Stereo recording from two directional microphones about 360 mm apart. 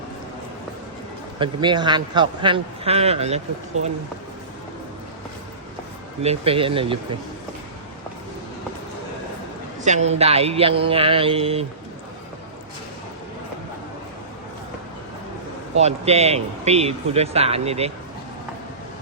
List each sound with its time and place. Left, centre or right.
1.4 s speech: centre
6.2 s speech: centre
9.8 s speech: centre
15.8 s speech: centre